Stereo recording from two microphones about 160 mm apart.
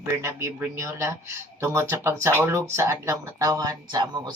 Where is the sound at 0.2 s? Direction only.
15° right (ahead or behind).